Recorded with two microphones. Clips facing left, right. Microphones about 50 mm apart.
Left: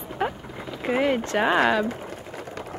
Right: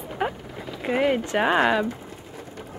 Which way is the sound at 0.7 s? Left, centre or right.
Centre.